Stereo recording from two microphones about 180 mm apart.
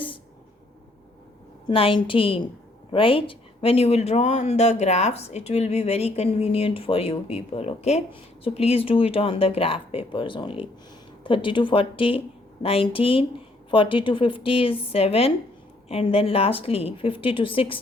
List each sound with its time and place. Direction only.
1.6 s a woman's voice: 30° left (ahead or behind)